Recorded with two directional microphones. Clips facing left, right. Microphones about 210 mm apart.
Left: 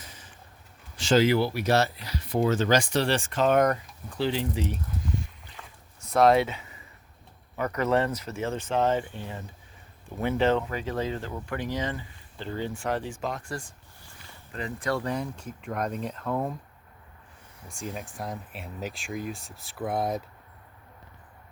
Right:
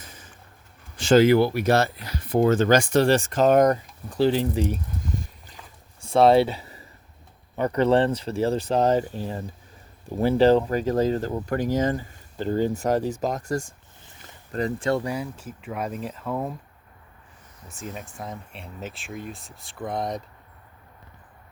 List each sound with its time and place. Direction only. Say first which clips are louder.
0.9 s speech: right 5 dB; 50° right (ahead or behind)
4.7 s a sound: right 2 dB; 40° right (ahead or behind)
6.0 s a sound: right 4 dB; 30° right (ahead or behind)
7.5 s speech: right 5 dB; 30° right (ahead or behind)
15.0 s speech: right 1 dB; 5° right (ahead or behind)
17.7 s speech: even; centre (ahead or behind)